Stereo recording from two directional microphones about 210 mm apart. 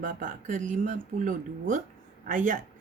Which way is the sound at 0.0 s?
40° right (ahead or behind).